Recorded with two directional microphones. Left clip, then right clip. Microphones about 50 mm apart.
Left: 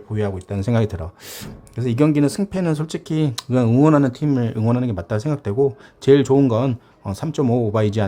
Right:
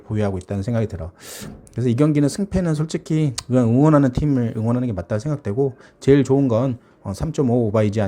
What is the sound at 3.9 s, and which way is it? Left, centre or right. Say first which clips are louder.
Speech: even; right.